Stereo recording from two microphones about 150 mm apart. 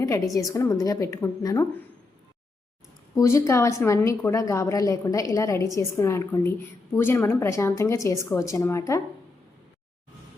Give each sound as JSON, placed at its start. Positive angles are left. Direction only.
{"t": 0.0, "sound": "a woman's voice", "side_deg": 25}
{"t": 3.2, "sound": "a woman's voice", "side_deg": 20}